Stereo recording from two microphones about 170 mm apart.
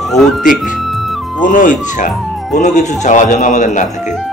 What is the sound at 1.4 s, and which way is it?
Speech, 50° left (ahead or behind).